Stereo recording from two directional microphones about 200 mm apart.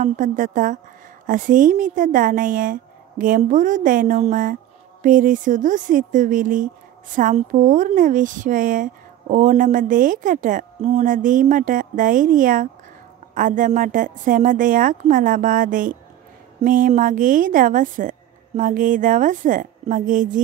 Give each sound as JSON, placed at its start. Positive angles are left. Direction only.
{"t": 0.0, "sound": "speech", "side_deg": -40}